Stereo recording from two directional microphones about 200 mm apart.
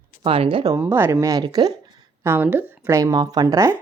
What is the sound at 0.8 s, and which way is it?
Speech, 10° right (ahead or behind).